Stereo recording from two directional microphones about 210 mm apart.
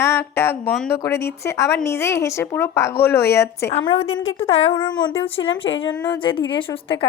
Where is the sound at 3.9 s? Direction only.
80° left.